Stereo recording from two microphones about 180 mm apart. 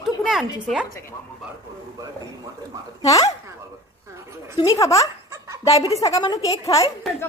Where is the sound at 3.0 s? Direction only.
20° left (ahead or behind).